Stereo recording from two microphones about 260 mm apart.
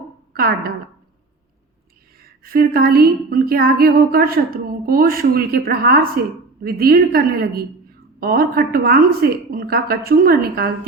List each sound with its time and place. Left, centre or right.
0.3 s speech: right
2.4 s speech: right